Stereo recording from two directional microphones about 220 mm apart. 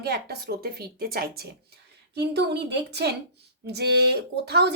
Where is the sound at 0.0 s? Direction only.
45° right (ahead or behind).